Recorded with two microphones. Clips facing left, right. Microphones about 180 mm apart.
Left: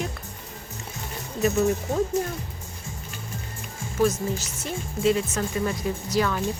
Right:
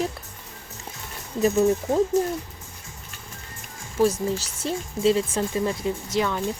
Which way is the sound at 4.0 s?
30° right (ahead or behind).